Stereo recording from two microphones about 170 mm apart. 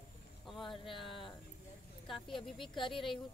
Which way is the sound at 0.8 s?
30° left (ahead or behind).